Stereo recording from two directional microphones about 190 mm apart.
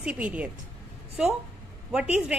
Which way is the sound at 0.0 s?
5° right (ahead or behind).